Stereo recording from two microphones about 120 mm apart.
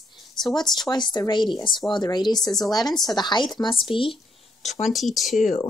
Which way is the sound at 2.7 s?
35° left (ahead or behind).